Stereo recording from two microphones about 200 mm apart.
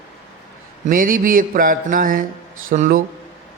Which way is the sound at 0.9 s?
45° right (ahead or behind).